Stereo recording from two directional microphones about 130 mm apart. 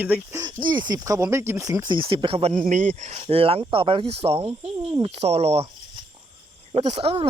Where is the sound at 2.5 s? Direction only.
75° right (ahead or behind); by 5.6 s 55° right (ahead or behind).